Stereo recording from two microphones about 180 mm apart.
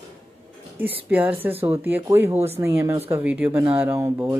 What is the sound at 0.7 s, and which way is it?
Speech, 10° right (ahead or behind).